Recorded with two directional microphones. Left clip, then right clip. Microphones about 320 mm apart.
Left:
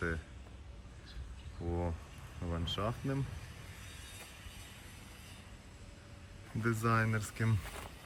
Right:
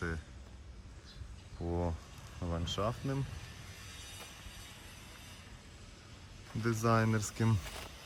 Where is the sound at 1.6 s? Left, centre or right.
Right.